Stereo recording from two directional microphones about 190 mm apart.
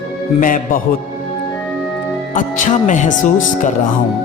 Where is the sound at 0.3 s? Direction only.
45° left (ahead or behind).